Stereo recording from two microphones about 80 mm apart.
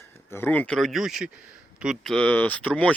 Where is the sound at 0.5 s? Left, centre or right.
Centre.